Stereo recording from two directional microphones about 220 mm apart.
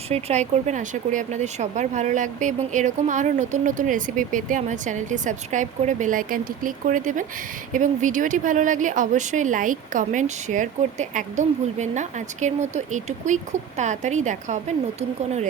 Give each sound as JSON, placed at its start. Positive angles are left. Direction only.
{"t": 0.1, "sound": "speech", "side_deg": -30}